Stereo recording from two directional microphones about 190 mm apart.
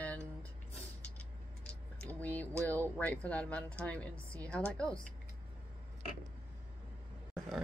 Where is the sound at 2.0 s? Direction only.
10° left (ahead or behind).